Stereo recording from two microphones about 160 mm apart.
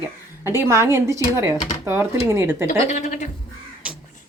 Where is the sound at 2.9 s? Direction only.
50° left (ahead or behind).